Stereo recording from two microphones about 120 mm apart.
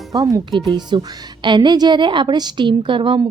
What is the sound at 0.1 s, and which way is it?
Speech, 30° right (ahead or behind).